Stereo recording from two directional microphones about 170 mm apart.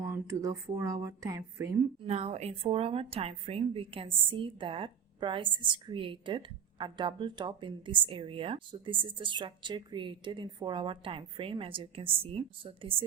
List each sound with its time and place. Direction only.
0.0 s a sound: 15° right (ahead or behind)
0.8 s speech: 20° right (ahead or behind)
2.0 s speech: 40° right (ahead or behind)